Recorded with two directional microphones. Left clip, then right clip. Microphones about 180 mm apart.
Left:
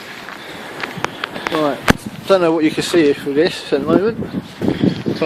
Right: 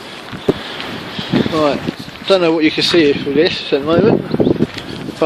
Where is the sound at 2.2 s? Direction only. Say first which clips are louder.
Right 1 dB; 5° left (ahead or behind).